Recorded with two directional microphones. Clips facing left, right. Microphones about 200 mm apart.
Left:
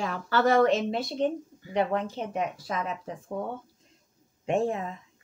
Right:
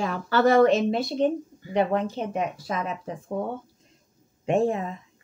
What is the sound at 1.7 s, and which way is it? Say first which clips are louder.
Speech: right 3 dB; 20° right (ahead or behind).